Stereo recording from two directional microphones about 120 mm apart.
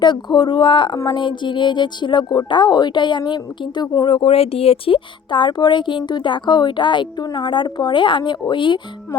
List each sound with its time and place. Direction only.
0.0 s speech: 35° left (ahead or behind)